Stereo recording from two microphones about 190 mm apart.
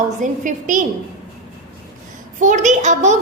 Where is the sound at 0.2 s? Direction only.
40° right (ahead or behind).